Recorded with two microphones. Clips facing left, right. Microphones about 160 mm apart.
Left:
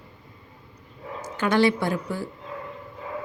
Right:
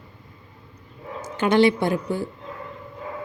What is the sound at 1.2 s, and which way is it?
Speech, 20° right (ahead or behind).